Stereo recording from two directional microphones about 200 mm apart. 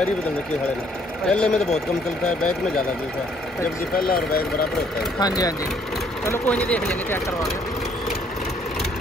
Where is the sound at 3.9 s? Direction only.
50° left (ahead or behind).